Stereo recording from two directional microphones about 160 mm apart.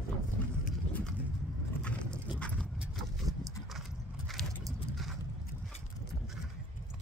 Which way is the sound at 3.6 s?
Centre (ahead or behind).